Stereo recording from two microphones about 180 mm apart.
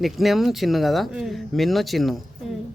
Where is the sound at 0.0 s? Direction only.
Centre (ahead or behind).